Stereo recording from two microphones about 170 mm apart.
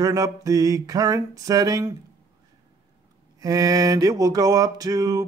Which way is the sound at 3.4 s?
20° right (ahead or behind).